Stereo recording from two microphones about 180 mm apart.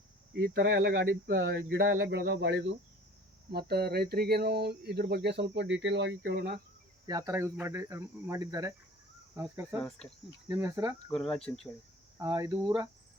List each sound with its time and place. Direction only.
0.3 s speech: 75° right (ahead or behind)
3.5 s speech: 65° right (ahead or behind)
7.1 s speech: 20° right (ahead or behind)
9.7 s speech: 5° left (ahead or behind)
10.5 s speech: 15° right (ahead or behind)
11.1 s speech: 5° left (ahead or behind)
12.1 s speech: 20° right (ahead or behind)